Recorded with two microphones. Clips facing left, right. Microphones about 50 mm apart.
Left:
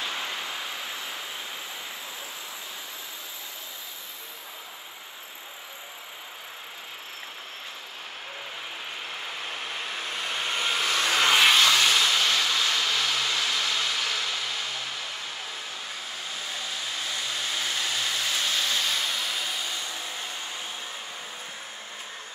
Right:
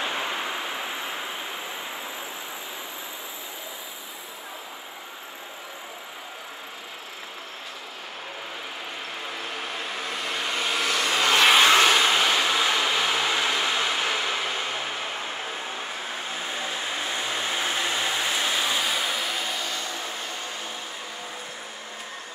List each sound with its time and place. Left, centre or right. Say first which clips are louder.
0.0 s vehicle: right 4 dB; right
10.6 s vehicle: right 1 dB; right; by 19.6 s centre